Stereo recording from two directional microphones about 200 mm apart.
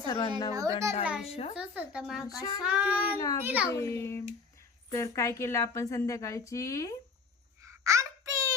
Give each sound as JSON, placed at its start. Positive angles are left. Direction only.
{"t": 0.1, "sound": "a woman's voice", "side_deg": 20}
{"t": 0.5, "sound": "a child's voice", "side_deg": -15}
{"t": 1.2, "sound": "speech", "side_deg": 30}
{"t": 1.5, "sound": "speech", "side_deg": -5}
{"t": 2.2, "sound": "child singing", "side_deg": 20}
{"t": 2.6, "sound": "a child's voice", "side_deg": -5}
{"t": 3.7, "sound": "a woman's voice", "side_deg": 15}
{"t": 7.9, "sound": "a sound", "side_deg": -15}